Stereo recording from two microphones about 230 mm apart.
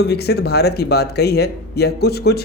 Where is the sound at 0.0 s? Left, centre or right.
Left.